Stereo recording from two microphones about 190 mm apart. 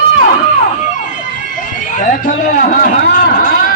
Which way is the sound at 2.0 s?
45° left (ahead or behind).